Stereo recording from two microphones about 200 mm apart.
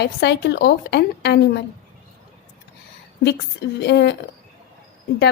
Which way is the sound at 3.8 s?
60° left (ahead or behind).